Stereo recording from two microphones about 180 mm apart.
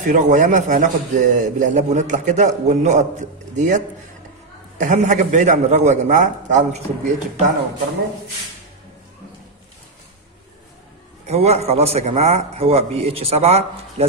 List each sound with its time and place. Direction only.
0.1 s a man's voice: 45° right (ahead or behind)
11.2 s a man's voice: 35° right (ahead or behind)